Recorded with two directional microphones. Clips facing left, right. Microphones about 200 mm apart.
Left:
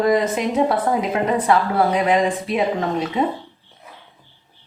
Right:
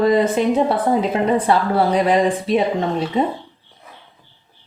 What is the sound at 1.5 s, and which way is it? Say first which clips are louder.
Speech: right 1 dB; 35° right (ahead or behind).